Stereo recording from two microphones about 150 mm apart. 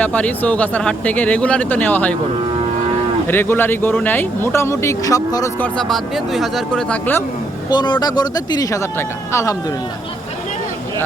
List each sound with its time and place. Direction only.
0.0 s speech: 10° left (ahead or behind)
3.2 s speech: 15° left (ahead or behind)
5.5 s speech: 10° left (ahead or behind)
7.7 s speech: 30° left (ahead or behind)